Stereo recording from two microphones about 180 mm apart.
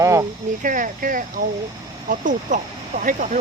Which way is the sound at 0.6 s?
45° right (ahead or behind).